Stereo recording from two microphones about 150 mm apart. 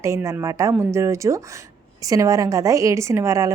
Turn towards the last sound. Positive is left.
turn(degrees=-20)  # may be behind; listen again after turning